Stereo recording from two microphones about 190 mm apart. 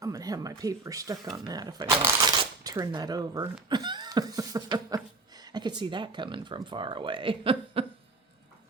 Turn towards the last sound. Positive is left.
turn(degrees=-30)  # may be behind; listen again after turning